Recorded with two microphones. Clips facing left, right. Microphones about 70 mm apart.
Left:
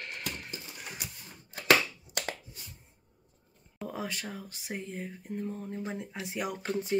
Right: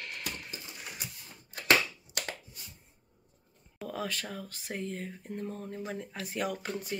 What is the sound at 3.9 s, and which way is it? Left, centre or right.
Speech, centre.